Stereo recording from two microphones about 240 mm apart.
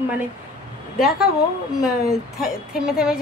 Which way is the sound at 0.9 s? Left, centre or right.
Centre.